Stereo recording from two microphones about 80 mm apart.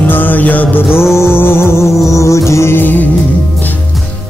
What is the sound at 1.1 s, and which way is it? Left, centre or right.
Music, left.